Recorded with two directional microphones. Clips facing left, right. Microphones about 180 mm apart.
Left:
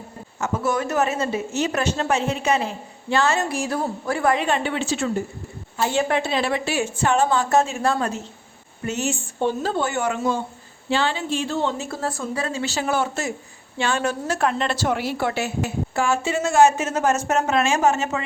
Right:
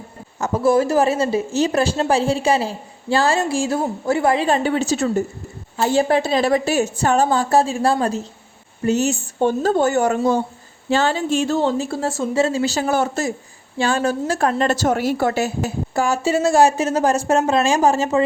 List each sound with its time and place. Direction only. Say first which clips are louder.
0.3 s a woman's voice: right 7 dB; 35° right (ahead or behind)